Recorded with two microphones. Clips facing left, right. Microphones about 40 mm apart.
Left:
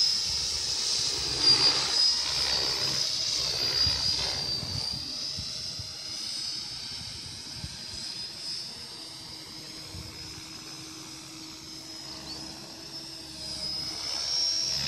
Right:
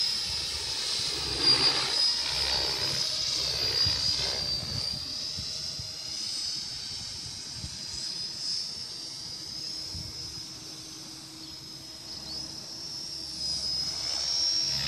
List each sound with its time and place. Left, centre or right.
0.0 s vehicle: centre
13.5 s helicopter: centre